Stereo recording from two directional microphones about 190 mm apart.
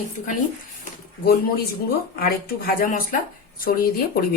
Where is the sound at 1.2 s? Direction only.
55° left (ahead or behind).